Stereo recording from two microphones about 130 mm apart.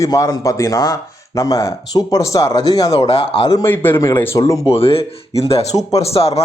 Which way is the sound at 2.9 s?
50° left (ahead or behind).